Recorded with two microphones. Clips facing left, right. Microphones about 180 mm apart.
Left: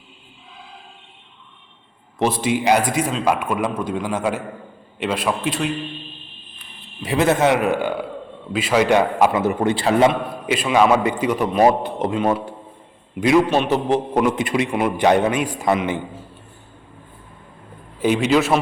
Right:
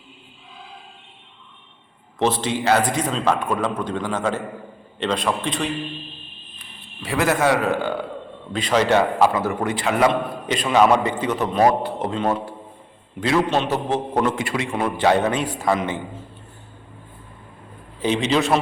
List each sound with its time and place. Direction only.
2.1 s a man's voice: 10° left (ahead or behind)
7.0 s a man's voice: 20° left (ahead or behind)
10.1 s a man's voice: 10° left (ahead or behind)
18.0 s a man's voice: 10° left (ahead or behind)